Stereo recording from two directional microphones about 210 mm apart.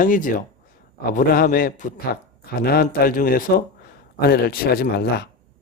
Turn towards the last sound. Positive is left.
turn(degrees=50)  # may be behind; listen again after turning